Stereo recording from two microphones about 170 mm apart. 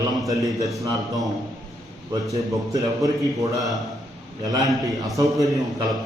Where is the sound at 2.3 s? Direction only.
20° right (ahead or behind).